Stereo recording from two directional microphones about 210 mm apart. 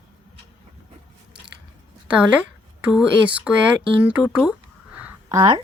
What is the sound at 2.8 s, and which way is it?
Speech, 5° right (ahead or behind).